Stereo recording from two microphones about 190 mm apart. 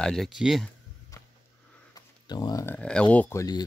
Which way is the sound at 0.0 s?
Centre (ahead or behind).